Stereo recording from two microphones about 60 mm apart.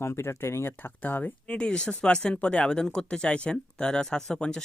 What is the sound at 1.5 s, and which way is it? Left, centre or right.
Speech, centre.